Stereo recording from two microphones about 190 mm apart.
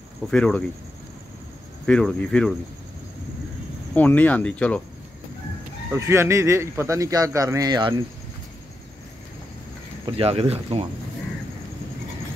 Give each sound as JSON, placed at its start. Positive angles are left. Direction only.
{"t": 0.3, "sound": "speech", "side_deg": 5}
{"t": 1.9, "sound": "speech", "side_deg": 5}
{"t": 3.9, "sound": "speech", "side_deg": 10}
{"t": 5.9, "sound": "speech", "side_deg": -15}
{"t": 10.0, "sound": "speech", "side_deg": -30}